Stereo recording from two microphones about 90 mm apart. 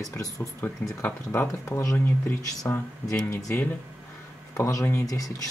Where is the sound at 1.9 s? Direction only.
25° left (ahead or behind).